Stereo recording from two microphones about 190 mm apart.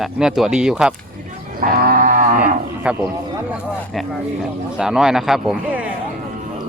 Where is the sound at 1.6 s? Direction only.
50° right (ahead or behind).